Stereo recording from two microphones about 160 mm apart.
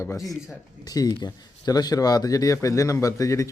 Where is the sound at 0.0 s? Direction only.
20° left (ahead or behind).